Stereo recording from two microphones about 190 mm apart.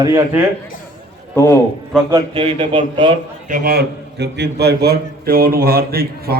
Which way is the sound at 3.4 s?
50° right (ahead or behind).